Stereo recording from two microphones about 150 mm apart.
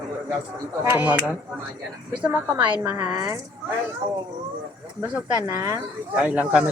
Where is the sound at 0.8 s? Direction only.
10° right (ahead or behind).